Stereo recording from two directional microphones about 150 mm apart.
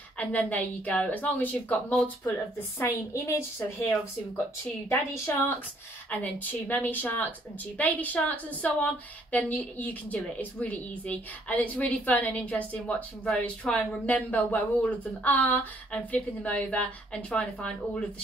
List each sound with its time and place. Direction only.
0.2 s a woman's voice: 10° left (ahead or behind)
2.8 s a woman's voice: 20° left (ahead or behind)